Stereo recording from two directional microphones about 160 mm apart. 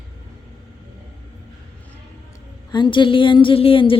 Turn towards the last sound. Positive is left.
turn(degrees=35)  # may be behind; listen again after turning